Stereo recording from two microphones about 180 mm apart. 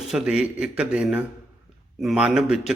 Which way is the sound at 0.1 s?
5° right (ahead or behind).